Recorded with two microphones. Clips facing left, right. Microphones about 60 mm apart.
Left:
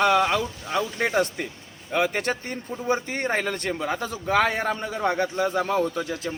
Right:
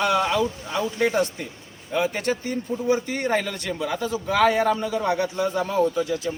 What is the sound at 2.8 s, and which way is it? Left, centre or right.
A man's voice, left.